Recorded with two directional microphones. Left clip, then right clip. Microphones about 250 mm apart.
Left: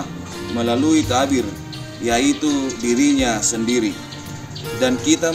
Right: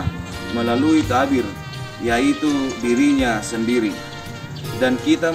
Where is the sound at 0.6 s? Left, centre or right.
Centre.